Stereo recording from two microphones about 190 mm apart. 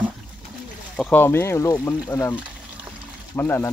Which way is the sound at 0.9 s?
5° left (ahead or behind).